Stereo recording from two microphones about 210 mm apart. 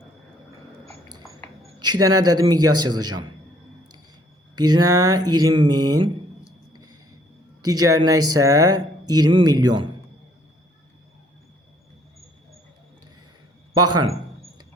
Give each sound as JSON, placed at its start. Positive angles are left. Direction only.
{"t": 0.9, "sound": "a sound", "side_deg": -20}
{"t": 1.8, "sound": "speech", "side_deg": -20}
{"t": 4.5, "sound": "speech", "side_deg": -20}
{"t": 6.7, "sound": "a sound", "side_deg": -20}
{"t": 7.6, "sound": "speech", "side_deg": -15}
{"t": 13.7, "sound": "a man's voice", "side_deg": -90}